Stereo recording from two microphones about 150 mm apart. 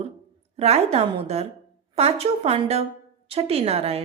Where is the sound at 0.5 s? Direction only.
45° right (ahead or behind).